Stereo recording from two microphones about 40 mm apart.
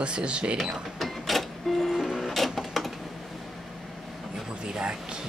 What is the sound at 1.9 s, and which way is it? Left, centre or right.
Printer, centre.